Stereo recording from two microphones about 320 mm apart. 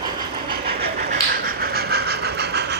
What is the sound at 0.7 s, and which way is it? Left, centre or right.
Vehicle, right.